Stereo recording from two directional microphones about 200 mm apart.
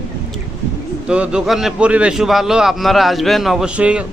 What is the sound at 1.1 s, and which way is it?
A man's voice, 5° right (ahead or behind).